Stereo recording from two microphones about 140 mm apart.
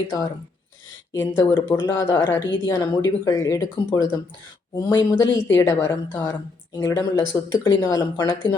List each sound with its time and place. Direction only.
1.1 s speech: 20° left (ahead or behind)